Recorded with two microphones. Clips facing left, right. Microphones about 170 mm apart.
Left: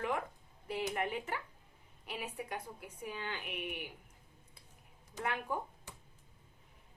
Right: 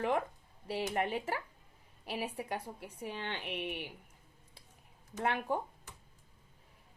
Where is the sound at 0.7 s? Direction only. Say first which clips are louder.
Right 2 dB; 30° right (ahead or behind).